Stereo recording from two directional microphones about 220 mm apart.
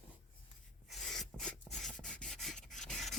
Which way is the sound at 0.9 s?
Centre (ahead or behind).